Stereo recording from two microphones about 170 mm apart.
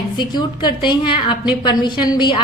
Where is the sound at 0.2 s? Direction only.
25° left (ahead or behind).